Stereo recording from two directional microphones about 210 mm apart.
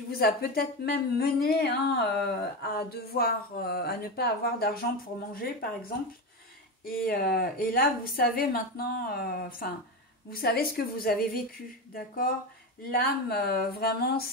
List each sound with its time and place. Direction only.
0.1 s speech: 45° left (ahead or behind)
12.9 s speech: 45° left (ahead or behind)